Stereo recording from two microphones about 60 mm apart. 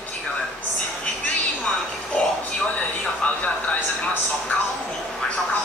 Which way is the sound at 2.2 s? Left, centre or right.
Left.